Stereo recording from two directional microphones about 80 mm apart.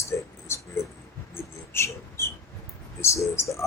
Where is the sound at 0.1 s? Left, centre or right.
Left.